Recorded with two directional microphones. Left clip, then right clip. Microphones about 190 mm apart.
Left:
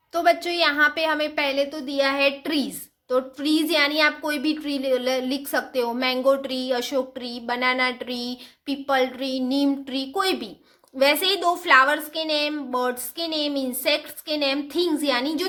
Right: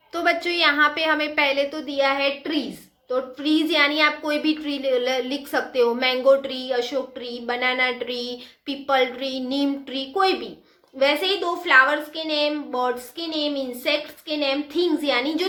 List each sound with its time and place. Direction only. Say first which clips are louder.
0.1 s a woman's voice: left 1 dB; 35° left (ahead or behind)